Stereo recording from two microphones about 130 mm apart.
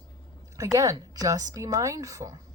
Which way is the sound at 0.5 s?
25° right (ahead or behind).